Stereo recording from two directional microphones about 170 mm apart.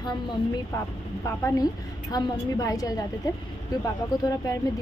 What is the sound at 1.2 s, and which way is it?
A woman's voice, 20° left (ahead or behind).